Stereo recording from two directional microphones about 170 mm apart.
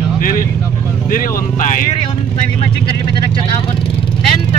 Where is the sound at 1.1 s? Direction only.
50° left (ahead or behind).